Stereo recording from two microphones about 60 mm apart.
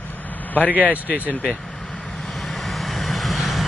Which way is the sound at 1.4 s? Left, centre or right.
Centre.